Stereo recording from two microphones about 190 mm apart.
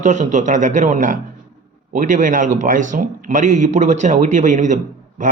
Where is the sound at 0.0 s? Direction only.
40° right (ahead or behind).